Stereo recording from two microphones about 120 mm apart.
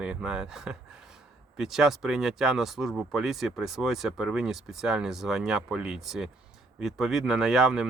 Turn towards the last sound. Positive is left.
turn(degrees=0)  # may be behind; listen again after turning